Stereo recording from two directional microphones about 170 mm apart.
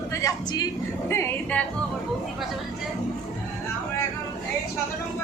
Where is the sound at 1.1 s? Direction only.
15° left (ahead or behind).